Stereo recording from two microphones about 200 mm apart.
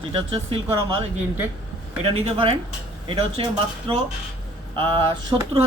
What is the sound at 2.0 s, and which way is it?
Speech, 30° right (ahead or behind).